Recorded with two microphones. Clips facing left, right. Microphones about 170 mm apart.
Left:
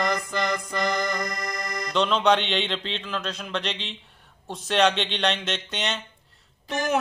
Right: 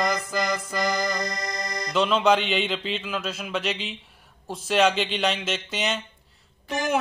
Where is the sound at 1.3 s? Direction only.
20° right (ahead or behind).